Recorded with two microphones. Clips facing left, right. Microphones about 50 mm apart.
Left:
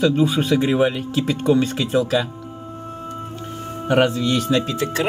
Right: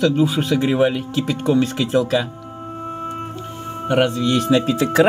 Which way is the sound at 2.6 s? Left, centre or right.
Right.